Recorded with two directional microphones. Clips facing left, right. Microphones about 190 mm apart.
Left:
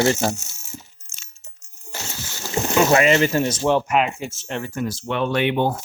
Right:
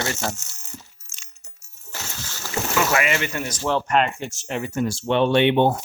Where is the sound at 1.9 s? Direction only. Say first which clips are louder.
Left 2 dB; 20° left (ahead or behind).